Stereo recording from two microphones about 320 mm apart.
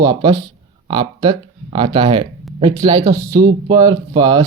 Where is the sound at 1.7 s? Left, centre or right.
Centre.